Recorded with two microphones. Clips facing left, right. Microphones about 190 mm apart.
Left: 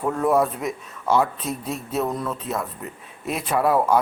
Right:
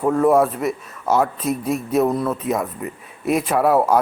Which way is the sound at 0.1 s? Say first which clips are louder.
Right 5 dB; 5° right (ahead or behind).